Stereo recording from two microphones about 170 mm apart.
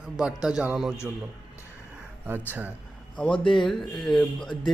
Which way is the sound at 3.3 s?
30° left (ahead or behind).